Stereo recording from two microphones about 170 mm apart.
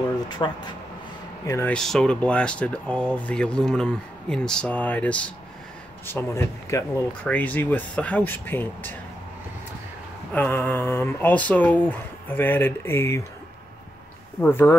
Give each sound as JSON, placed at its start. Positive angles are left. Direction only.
{"t": 0.3, "sound": "speech", "side_deg": 25}
{"t": 1.7, "sound": "speech", "side_deg": 5}
{"t": 10.3, "sound": "speech", "side_deg": 10}
{"t": 14.4, "sound": "speech", "side_deg": 10}